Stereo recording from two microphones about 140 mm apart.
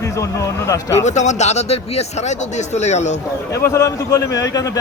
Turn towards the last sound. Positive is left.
turn(degrees=25)  # may be behind; listen again after turning